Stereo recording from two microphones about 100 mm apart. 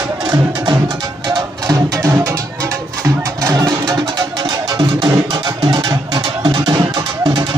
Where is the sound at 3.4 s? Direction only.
35° right (ahead or behind).